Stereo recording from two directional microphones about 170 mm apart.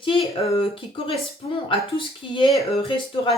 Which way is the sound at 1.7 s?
30° left (ahead or behind).